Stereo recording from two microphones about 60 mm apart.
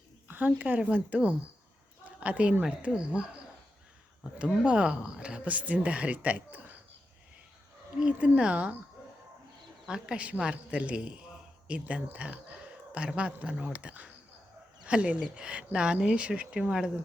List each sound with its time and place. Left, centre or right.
0.3 s speech: right
4.4 s speech: centre
7.9 s speech: centre
9.8 s speech: centre